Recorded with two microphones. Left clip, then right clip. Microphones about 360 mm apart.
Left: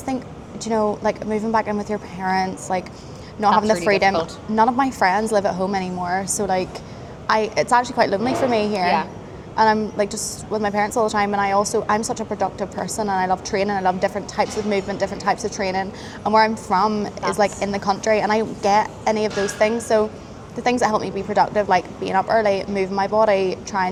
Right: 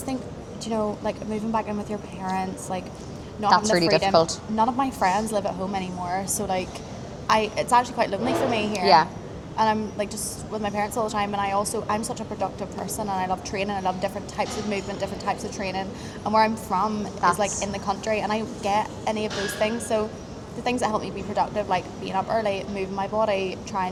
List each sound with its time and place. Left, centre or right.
0.6 s a woman's voice: left
3.8 s a woman's voice: left
23.1 s a woman's voice: left